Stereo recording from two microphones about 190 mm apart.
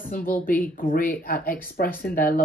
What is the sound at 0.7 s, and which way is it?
Speech, 45° left (ahead or behind).